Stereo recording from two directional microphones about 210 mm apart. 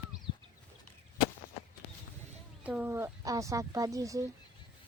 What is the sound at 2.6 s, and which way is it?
Speech, 10° right (ahead or behind).